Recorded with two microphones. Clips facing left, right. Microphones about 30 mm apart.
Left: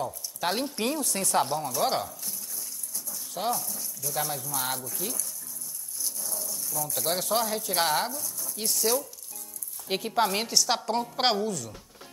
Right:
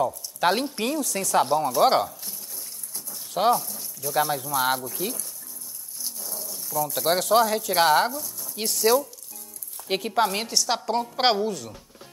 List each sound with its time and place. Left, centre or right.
0.0 s speech: right
2.2 s water: right
6.0 s a sound: centre
7.2 s a woman's voice: centre
11.4 s speech: right